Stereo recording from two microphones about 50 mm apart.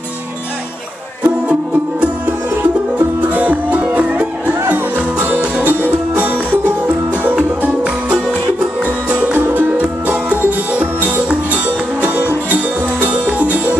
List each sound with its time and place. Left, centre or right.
1.2 s music: right
3.3 s music: right
7.6 s music: right
9.3 s music: right